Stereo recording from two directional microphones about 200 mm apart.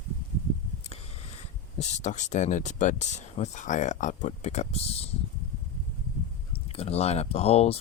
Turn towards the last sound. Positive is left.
turn(degrees=30)  # may be behind; listen again after turning